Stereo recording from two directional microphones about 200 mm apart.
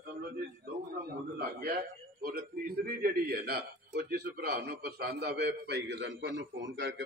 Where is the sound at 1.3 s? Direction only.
50° right (ahead or behind).